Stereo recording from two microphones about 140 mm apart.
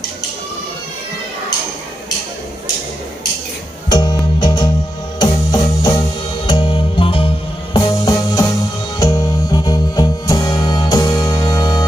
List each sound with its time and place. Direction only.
3.9 s music: 30° left (ahead or behind)